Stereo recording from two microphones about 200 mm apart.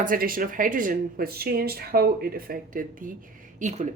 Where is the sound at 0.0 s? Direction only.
45° right (ahead or behind).